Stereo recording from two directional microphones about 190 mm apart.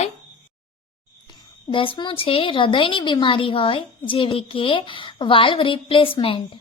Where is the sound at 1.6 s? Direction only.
30° left (ahead or behind).